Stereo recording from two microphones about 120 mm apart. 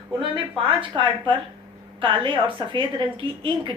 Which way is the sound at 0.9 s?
45° right (ahead or behind).